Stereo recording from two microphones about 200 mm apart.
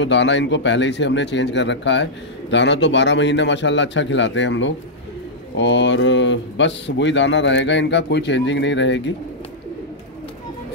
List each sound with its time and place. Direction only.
0.0 s speech: 65° left (ahead or behind)